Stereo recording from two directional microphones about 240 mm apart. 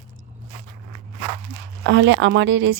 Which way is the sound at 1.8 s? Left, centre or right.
Right.